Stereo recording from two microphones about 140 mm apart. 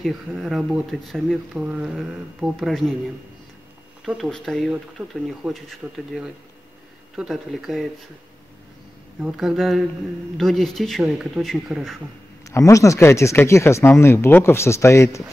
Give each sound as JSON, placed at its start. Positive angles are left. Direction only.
{"t": 0.0, "sound": "speech", "side_deg": 0}
{"t": 4.0, "sound": "speech", "side_deg": 0}
{"t": 9.2, "sound": "speech", "side_deg": 0}
{"t": 12.4, "sound": "speech", "side_deg": 20}